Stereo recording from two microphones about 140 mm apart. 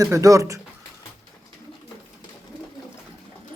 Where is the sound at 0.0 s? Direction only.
25° right (ahead or behind).